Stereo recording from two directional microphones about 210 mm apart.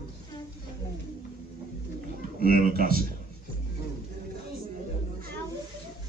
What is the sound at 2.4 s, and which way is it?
Speech, 40° right (ahead or behind).